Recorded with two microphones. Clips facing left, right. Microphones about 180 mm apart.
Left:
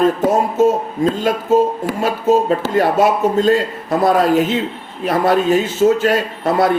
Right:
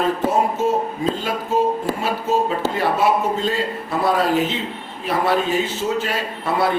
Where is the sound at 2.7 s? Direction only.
45° left (ahead or behind).